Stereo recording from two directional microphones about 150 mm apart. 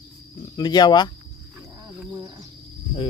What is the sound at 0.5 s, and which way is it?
Speech, 30° left (ahead or behind).